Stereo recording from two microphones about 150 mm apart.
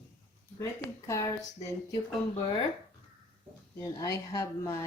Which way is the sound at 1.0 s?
20° left (ahead or behind).